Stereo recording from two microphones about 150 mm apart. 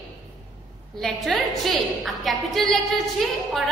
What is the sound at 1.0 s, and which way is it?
A woman's voice, centre (ahead or behind).